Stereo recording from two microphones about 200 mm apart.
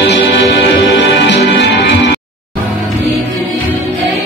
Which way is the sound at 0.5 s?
60° left (ahead or behind).